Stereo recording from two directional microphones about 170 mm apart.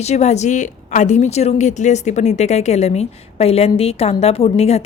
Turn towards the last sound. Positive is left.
turn(degrees=35)  # may be behind; listen again after turning